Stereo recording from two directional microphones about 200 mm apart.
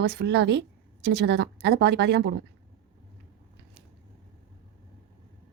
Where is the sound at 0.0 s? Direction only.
55° right (ahead or behind).